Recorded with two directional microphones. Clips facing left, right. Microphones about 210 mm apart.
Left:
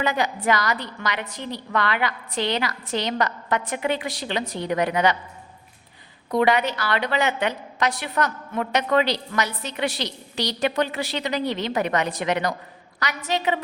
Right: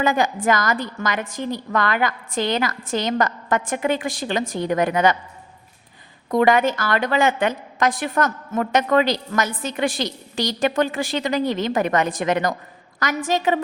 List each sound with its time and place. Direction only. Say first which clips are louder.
0.0 s a woman's voice: right 4 dB; 50° right (ahead or behind)
6.3 s a woman's voice: right 3 dB; 50° right (ahead or behind)